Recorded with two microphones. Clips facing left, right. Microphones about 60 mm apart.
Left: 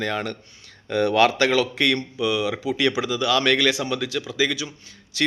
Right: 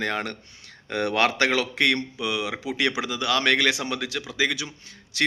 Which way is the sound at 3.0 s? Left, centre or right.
Right.